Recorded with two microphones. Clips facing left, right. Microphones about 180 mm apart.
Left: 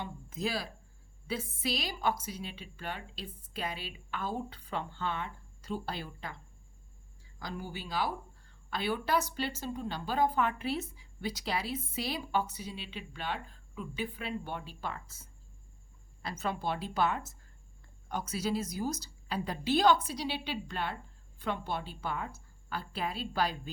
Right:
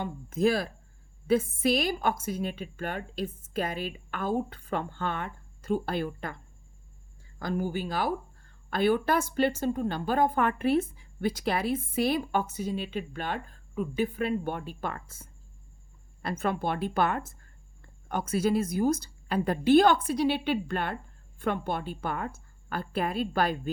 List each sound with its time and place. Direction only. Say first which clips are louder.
0.0 s a woman's voice: right 10 dB; 50° right (ahead or behind)